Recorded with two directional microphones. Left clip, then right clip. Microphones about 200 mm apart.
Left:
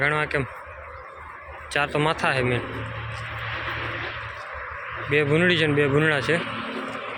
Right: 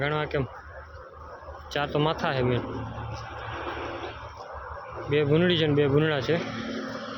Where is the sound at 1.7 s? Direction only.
10° right (ahead or behind).